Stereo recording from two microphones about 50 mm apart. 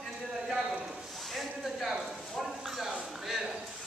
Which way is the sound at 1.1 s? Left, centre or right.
Centre.